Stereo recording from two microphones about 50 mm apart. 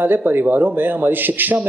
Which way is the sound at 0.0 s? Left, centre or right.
Right.